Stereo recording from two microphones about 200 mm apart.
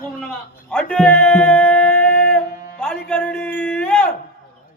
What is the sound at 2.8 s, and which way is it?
Speech, 5° left (ahead or behind).